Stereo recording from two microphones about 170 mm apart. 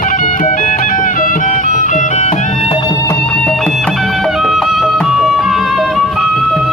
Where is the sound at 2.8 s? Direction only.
25° left (ahead or behind).